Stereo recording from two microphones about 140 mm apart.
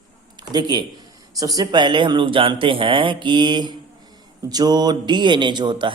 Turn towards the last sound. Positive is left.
turn(degrees=-35)  # may be behind; listen again after turning